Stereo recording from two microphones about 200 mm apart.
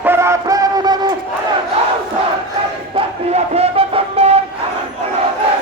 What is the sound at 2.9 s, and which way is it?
Music, 30° right (ahead or behind).